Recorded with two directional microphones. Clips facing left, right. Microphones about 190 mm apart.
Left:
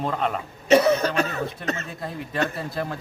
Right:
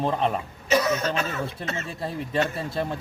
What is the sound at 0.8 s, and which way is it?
Speech, 35° left (ahead or behind).